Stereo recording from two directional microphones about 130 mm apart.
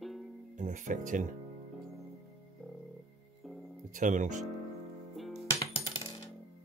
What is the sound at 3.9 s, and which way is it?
Speech, 80° right.